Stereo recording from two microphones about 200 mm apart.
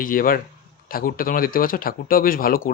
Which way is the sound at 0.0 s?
45° left (ahead or behind).